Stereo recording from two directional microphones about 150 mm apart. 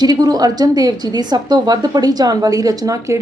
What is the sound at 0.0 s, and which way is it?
Speech, 25° right (ahead or behind).